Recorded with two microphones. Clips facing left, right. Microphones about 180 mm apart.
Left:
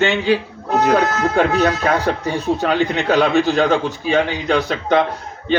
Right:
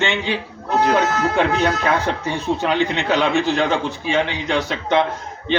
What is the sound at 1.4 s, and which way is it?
Speech, 40° left (ahead or behind).